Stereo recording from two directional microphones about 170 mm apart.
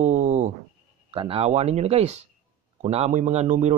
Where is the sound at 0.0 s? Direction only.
45° right (ahead or behind).